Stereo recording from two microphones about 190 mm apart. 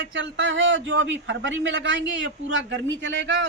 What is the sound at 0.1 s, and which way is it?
A man's voice, 80° right.